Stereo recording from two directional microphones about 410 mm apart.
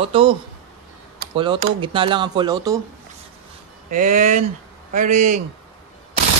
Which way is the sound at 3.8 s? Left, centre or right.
Centre.